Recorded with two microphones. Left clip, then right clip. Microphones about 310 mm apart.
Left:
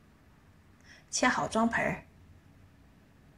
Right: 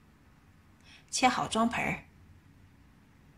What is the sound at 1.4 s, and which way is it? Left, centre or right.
Speech, centre.